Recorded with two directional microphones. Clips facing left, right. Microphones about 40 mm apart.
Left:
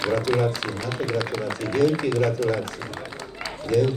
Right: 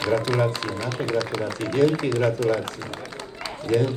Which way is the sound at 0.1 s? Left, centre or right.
Centre.